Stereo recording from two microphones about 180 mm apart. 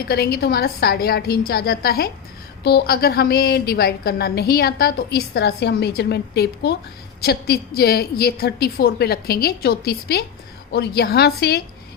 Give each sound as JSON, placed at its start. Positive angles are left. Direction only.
{"t": 0.1, "sound": "a woman's voice", "side_deg": 60}